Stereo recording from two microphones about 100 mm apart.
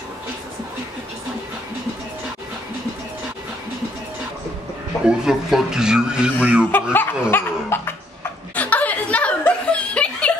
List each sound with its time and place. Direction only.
5.0 s speech: 5° right (ahead or behind)
6.7 s speech: 20° left (ahead or behind)
7.2 s laughter: 20° left (ahead or behind)